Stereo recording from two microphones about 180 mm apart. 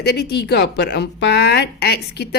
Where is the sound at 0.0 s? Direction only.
65° left (ahead or behind).